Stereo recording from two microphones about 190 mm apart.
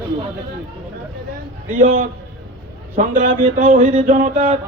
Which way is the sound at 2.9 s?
40° right (ahead or behind).